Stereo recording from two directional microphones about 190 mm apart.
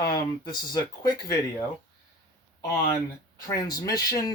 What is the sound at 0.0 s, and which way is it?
Speech, 20° left (ahead or behind).